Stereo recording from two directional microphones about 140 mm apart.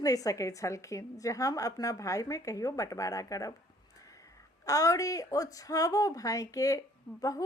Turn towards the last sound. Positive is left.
turn(degrees=25)  # may be behind; listen again after turning